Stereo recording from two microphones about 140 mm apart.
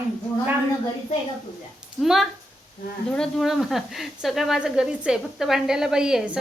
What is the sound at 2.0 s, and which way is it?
Speech, centre (ahead or behind).